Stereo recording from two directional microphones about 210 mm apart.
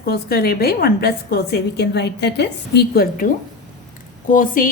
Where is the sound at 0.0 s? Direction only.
45° left (ahead or behind).